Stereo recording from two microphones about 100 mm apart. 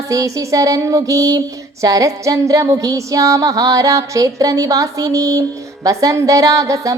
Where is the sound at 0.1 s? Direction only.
35° right (ahead or behind).